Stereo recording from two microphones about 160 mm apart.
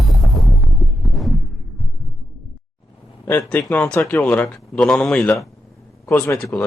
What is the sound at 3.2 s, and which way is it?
Speech, 10° left (ahead or behind).